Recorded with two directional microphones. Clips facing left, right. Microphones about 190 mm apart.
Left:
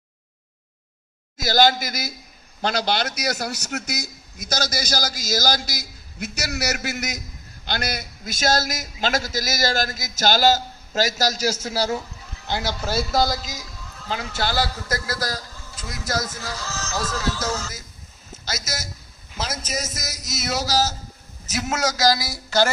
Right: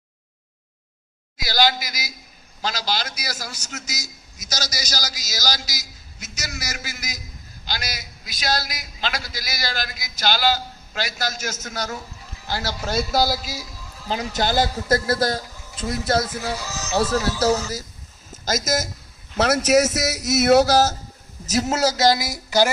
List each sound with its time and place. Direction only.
1.4 s a man's voice: 45° left (ahead or behind); by 11.9 s 30° left (ahead or behind)
12.5 s speech: 20° left (ahead or behind)
12.9 s a man's voice: centre (ahead or behind)
14.1 s a man's voice: 20° right (ahead or behind)
16.6 s speech: 15° right (ahead or behind)
16.9 s speech: 30° right (ahead or behind)
18.4 s speech: 45° right (ahead or behind)
19.4 s a man's voice: 70° right (ahead or behind)
21.5 s a man's voice: 35° right (ahead or behind); by 22.7 s 15° right (ahead or behind)